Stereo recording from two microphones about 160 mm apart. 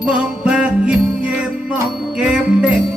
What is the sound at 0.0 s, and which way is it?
Jingle bell, 10° right (ahead or behind).